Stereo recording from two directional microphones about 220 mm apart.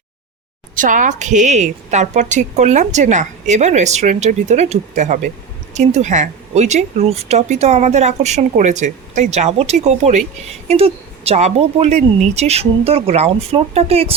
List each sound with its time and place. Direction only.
0.8 s a woman's voice: 35° right (ahead or behind)